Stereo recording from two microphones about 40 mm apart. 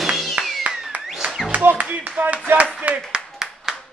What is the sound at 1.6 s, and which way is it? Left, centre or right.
Clapping, right.